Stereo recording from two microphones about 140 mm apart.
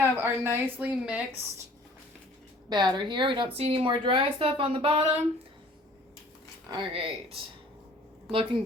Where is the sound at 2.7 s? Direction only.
30° right (ahead or behind).